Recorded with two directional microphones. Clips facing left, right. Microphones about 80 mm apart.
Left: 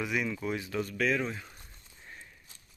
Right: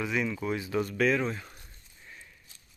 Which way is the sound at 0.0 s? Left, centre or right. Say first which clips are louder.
Right 2 dB; centre.